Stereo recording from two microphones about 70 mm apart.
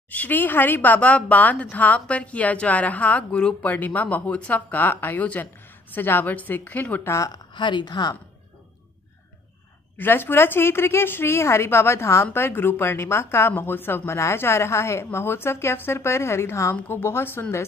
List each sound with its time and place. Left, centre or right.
0.1 s speech: left
3.6 s speech: left
7.1 s speech: left
7.5 s speech: left
9.9 s speech: left